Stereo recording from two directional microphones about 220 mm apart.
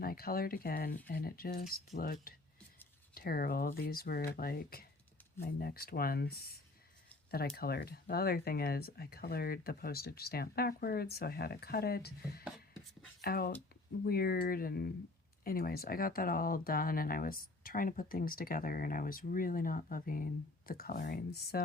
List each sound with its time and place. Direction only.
0.0 s speech: 45° left (ahead or behind)